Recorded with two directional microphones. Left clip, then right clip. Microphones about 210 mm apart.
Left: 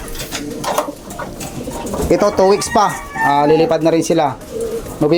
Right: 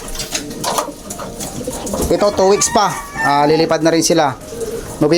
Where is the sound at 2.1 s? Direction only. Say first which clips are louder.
Left 1 dB; 20° left (ahead or behind).